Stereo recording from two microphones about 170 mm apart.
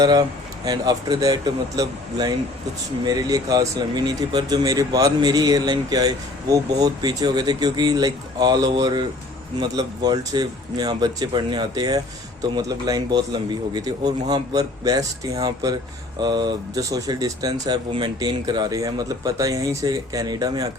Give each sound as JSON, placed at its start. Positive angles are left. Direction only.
{"t": 0.0, "sound": "speech", "side_deg": -25}